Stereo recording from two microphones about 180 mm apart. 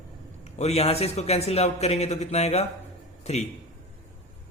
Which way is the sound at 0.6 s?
35° left (ahead or behind).